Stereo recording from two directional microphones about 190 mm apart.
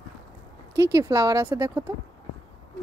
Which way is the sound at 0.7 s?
15° right (ahead or behind).